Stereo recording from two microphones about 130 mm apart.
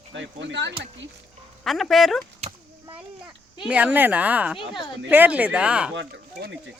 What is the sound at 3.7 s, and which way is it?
A woman's voice, 10° right (ahead or behind).